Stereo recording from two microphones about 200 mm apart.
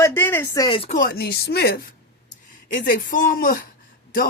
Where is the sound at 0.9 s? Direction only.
50° left (ahead or behind).